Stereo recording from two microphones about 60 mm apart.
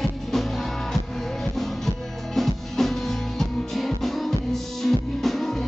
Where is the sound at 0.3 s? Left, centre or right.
Centre.